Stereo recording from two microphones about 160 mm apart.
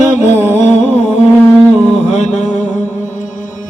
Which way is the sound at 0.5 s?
45° left (ahead or behind).